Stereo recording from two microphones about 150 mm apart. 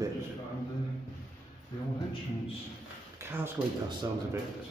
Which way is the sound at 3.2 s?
15° right (ahead or behind).